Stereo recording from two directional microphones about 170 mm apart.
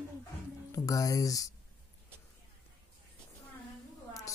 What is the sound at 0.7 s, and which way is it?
Speech, 20° left (ahead or behind).